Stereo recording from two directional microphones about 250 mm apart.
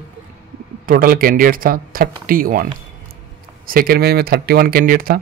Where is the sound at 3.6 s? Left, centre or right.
Right.